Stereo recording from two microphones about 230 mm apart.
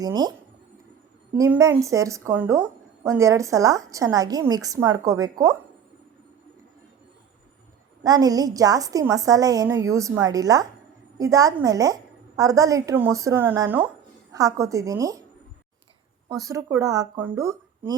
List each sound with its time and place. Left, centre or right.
0.0 s a woman's voice: centre
8.0 s a woman's voice: centre
16.3 s a woman's voice: centre